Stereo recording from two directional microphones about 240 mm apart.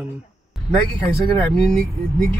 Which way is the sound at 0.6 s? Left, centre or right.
Centre.